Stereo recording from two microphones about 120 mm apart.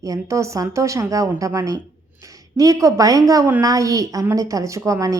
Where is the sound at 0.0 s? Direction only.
25° right (ahead or behind).